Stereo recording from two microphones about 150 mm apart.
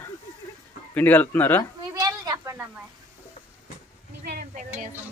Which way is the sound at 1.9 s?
25° right (ahead or behind).